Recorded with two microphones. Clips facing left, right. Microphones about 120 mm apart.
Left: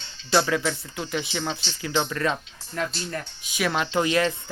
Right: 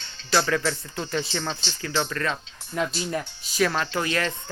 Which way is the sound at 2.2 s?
20° left (ahead or behind).